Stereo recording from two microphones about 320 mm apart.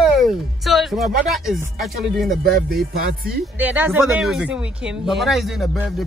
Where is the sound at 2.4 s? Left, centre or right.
Right.